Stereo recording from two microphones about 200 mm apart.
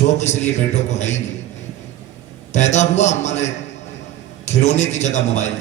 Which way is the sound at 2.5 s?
35° left (ahead or behind).